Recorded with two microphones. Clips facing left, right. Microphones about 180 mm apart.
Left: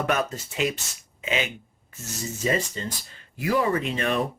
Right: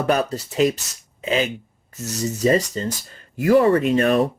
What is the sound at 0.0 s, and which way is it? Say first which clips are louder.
Speech: right 5 dB; 35° right (ahead or behind).